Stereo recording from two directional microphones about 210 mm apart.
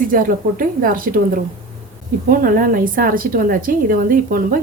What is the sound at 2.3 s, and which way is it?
Speech, 45° right (ahead or behind).